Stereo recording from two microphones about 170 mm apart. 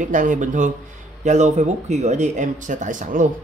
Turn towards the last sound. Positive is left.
turn(degrees=-50)  # may be behind; listen again after turning